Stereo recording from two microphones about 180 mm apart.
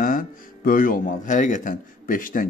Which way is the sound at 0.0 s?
50° left (ahead or behind).